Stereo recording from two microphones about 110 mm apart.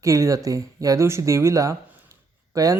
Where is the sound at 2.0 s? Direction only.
30° right (ahead or behind).